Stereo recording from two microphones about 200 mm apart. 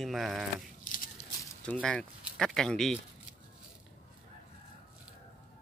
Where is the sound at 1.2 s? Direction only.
35° left (ahead or behind).